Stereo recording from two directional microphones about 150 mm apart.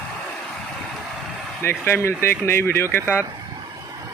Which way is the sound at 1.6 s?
15° left (ahead or behind).